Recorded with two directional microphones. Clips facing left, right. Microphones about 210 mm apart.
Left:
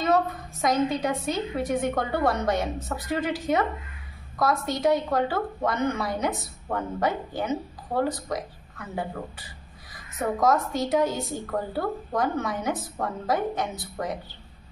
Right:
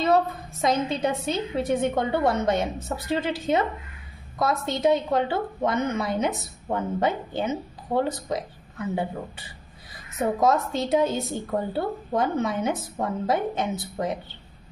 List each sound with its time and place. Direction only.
0.0 s a woman's voice: 25° right (ahead or behind)